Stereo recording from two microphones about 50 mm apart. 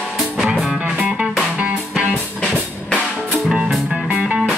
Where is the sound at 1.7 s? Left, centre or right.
Centre.